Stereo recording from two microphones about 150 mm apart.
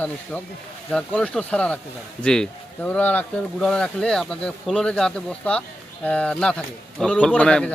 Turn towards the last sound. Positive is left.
turn(degrees=5)  # may be behind; listen again after turning